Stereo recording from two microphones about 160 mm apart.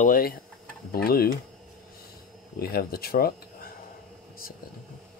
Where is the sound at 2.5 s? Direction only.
75° left (ahead or behind).